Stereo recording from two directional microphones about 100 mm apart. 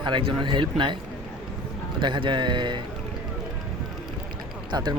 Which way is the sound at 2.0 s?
50° right (ahead or behind).